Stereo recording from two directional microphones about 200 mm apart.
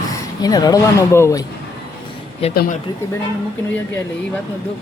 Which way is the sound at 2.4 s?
30° left (ahead or behind).